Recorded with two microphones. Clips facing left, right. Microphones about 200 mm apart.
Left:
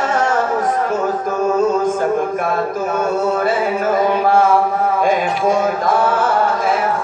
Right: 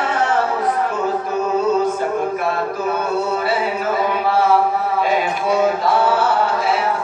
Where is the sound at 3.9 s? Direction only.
45° left (ahead or behind).